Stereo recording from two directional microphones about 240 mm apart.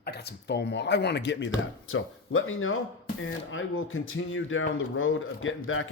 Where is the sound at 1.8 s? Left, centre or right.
Left.